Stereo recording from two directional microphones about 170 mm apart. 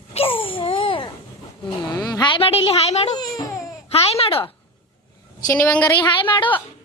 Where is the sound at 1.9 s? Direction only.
20° left (ahead or behind); by 3.1 s 40° left (ahead or behind).